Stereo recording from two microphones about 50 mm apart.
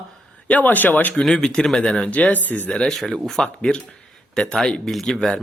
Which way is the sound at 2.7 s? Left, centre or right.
Centre.